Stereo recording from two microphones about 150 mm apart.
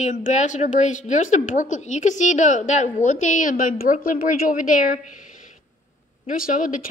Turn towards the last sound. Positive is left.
turn(degrees=60)  # may be behind; listen again after turning